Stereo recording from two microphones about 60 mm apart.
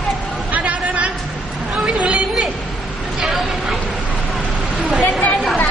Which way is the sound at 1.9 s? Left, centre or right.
Centre.